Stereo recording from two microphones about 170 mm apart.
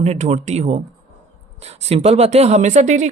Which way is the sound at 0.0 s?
40° right (ahead or behind).